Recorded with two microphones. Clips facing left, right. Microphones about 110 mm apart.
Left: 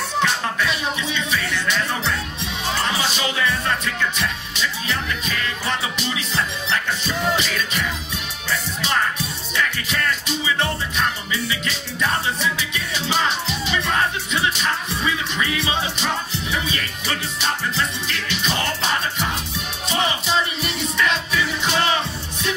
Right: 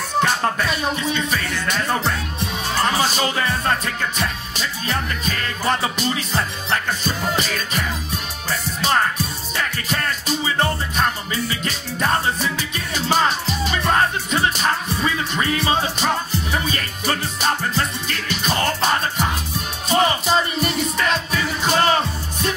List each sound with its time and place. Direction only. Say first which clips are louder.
0.2 s music: right 3 dB; 45° right (ahead or behind)